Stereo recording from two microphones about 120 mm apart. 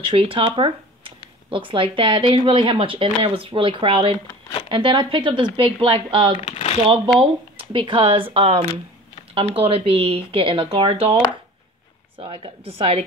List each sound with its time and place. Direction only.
0.1 s a woman's voice: 50° right (ahead or behind)
6.3 s a sound: 60° left (ahead or behind)
7.2 s a woman's voice: 45° right (ahead or behind)
12.2 s a woman's voice: 45° right (ahead or behind)